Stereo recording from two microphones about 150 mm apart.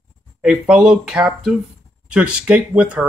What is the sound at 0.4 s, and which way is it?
Speech, 5° right (ahead or behind).